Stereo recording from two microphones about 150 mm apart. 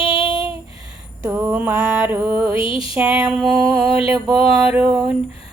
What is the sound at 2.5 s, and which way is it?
Music, 35° left (ahead or behind).